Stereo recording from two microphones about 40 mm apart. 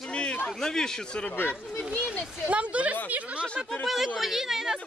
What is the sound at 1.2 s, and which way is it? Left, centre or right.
Speech, left.